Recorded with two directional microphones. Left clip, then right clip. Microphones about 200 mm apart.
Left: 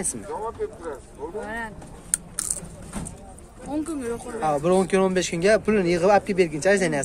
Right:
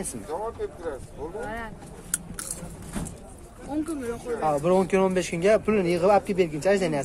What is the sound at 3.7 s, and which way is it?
Speech, 60° left (ahead or behind).